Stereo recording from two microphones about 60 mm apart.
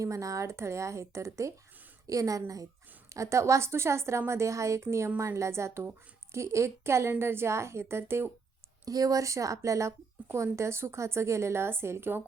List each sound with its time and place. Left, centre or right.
0.0 s speech: right
2.0 s speech: right
3.1 s a woman's voice: right
8.8 s a woman's voice: right